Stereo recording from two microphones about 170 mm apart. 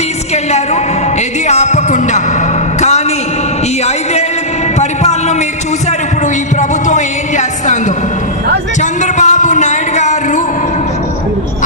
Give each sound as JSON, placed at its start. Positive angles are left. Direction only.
{"t": 1.5, "sound": "music", "side_deg": 45}
{"t": 6.6, "sound": "music", "side_deg": 45}
{"t": 8.8, "sound": "a sound", "side_deg": 45}